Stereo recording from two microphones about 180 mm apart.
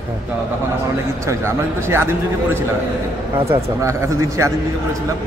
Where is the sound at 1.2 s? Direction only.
15° right (ahead or behind).